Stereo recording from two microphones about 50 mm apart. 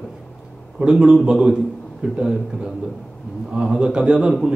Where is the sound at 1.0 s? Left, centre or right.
Centre.